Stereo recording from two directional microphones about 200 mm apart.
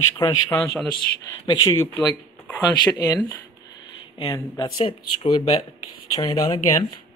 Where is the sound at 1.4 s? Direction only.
20° left (ahead or behind).